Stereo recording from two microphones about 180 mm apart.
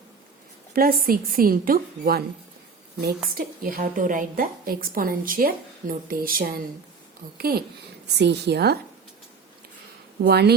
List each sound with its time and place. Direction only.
0.7 s a woman's voice: 50° right (ahead or behind)
3.3 s a woman's voice: 55° right (ahead or behind)
8.2 s a woman's voice: 70° right (ahead or behind)
10.2 s speech: 65° right (ahead or behind)